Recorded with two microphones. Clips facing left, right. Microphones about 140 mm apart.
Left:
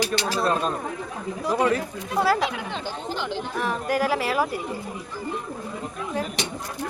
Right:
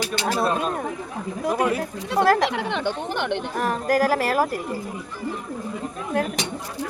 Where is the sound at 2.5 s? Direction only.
75° right (ahead or behind).